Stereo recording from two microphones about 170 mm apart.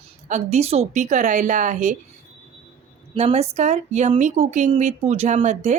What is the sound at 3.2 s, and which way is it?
A woman's voice, 40° right (ahead or behind).